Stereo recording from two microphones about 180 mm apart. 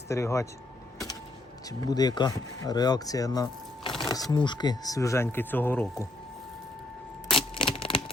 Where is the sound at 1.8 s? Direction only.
20° left (ahead or behind).